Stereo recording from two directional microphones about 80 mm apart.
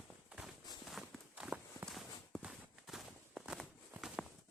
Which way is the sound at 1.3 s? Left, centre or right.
Centre.